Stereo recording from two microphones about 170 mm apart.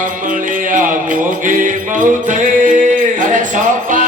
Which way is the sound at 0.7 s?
50° right (ahead or behind).